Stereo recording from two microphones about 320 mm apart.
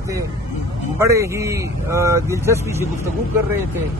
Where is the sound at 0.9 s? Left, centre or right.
Centre.